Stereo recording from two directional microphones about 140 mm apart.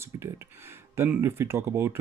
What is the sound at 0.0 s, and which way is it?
Speech, 20° right (ahead or behind).